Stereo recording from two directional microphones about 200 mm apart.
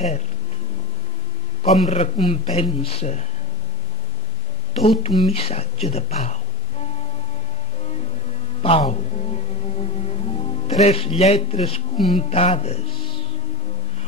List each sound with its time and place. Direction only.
1.6 s a man's voice: 30° left (ahead or behind)
4.8 s a man's voice: 30° left (ahead or behind)
8.6 s music: 30° left (ahead or behind)
12.1 s speech: 30° left (ahead or behind)